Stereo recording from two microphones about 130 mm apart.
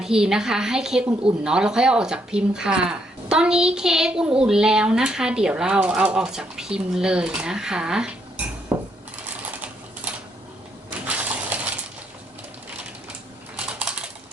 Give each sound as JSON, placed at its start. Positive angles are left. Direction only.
{"t": 0.0, "sound": "speech", "side_deg": -5}
{"t": 8.7, "sound": "dishes", "side_deg": -10}
{"t": 11.0, "sound": "coin", "side_deg": -10}
{"t": 13.7, "sound": "typing", "side_deg": -5}